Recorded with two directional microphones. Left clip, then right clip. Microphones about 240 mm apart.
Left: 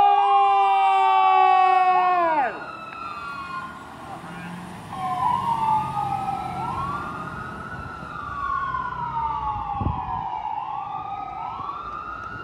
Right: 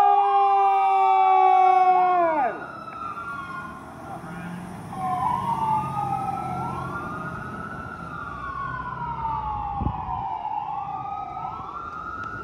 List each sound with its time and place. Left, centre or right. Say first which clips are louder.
0.0 s emergency vehicle: left 1 dB; left
5.0 s emergency vehicle: left 2 dB; left